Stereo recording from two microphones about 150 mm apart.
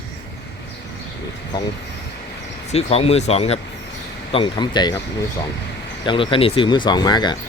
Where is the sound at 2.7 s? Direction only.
45° left (ahead or behind).